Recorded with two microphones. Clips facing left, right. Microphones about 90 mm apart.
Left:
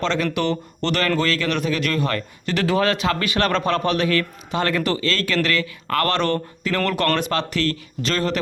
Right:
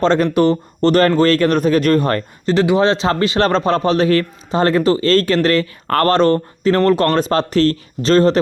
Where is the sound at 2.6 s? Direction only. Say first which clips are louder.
Right 4 dB; 20° right (ahead or behind).